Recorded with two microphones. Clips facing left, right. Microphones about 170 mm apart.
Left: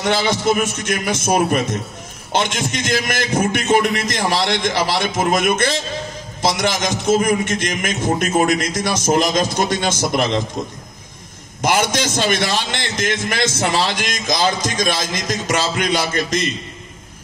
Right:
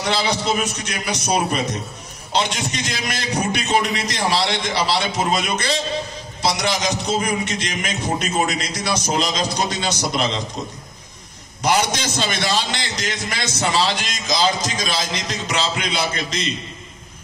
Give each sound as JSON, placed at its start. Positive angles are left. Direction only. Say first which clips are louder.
{"t": 0.0, "sound": "a man's voice", "louder": "left 4 dB", "side_deg": 50}
{"t": 11.6, "sound": "a man's voice", "louder": "left 2 dB", "side_deg": 50}